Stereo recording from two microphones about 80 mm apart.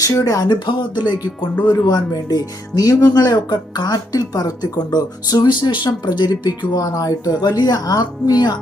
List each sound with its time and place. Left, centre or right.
0.0 s speech: left
0.4 s speech: left
1.6 s speech: left
7.5 s speech: left